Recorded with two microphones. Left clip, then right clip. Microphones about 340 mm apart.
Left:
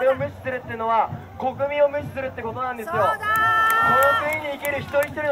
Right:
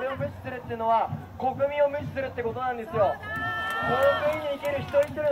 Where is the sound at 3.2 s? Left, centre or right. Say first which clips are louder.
Left 12 dB; left.